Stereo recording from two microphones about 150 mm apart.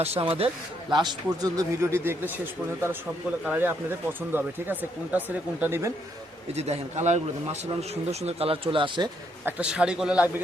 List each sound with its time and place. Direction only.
0.0 s a man's voice: 45° right (ahead or behind); by 5.9 s 15° right (ahead or behind)
6.5 s a man's voice: 45° right (ahead or behind)
9.4 s speech: 10° right (ahead or behind)